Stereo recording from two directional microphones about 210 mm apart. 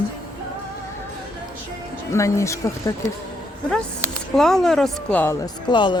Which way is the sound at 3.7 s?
5° left (ahead or behind).